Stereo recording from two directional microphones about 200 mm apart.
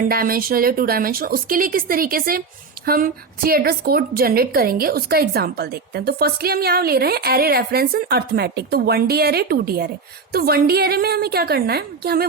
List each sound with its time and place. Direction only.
0.1 s a woman's voice: 45° right (ahead or behind)